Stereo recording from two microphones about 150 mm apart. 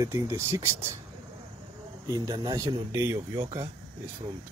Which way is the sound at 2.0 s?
25° right (ahead or behind).